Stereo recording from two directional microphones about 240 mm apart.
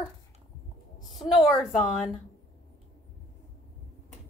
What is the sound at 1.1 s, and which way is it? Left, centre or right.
Speech, centre.